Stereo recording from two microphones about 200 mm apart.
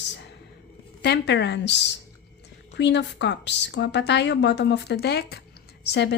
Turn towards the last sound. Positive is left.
turn(degrees=55)  # may be behind; listen again after turning